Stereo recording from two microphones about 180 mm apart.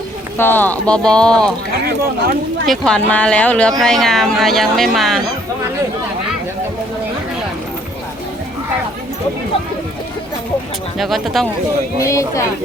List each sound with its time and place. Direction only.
0.3 s speech: 10° left (ahead or behind)
2.6 s speech: 5° left (ahead or behind)
10.9 s speech: centre (ahead or behind)
11.9 s speech: 20° left (ahead or behind)